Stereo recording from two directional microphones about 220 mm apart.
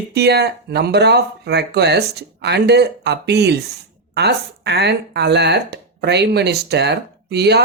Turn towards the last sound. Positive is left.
turn(degrees=-50)  # may be behind; listen again after turning